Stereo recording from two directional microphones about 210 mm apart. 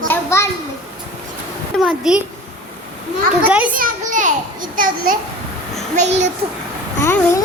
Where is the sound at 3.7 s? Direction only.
40° right (ahead or behind).